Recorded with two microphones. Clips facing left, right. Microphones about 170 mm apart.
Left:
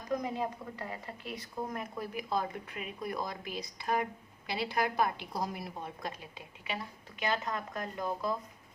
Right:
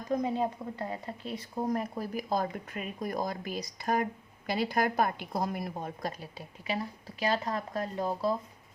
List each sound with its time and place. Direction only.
0.1 s speech: 30° right (ahead or behind)